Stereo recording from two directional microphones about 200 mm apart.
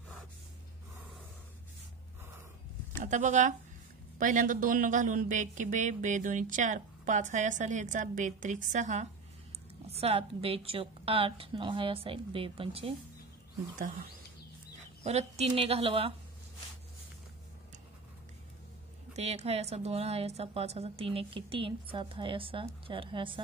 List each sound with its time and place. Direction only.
3.0 s a woman's voice: 40° right (ahead or behind)
15.0 s a woman's voice: 30° right (ahead or behind)
19.1 s a woman's voice: 30° right (ahead or behind)